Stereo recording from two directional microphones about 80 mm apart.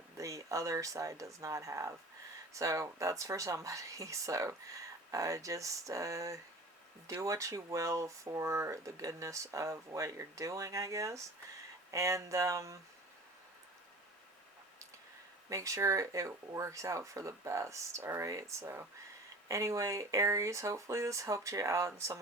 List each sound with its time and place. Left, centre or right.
0.2 s speech: right
15.4 s speech: right
18.6 s speech: right
19.5 s speech: right